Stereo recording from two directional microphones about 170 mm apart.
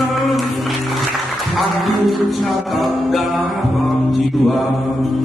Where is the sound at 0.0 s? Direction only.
Centre (ahead or behind).